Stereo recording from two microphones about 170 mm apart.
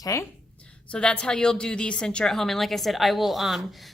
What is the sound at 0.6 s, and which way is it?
A woman's voice, 5° left (ahead or behind).